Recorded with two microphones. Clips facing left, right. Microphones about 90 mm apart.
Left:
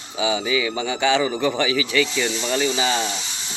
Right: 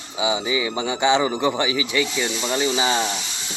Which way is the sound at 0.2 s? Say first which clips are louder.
Left 1 dB; 20° right (ahead or behind).